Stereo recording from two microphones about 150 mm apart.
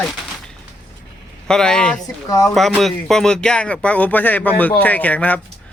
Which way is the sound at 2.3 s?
25° left (ahead or behind).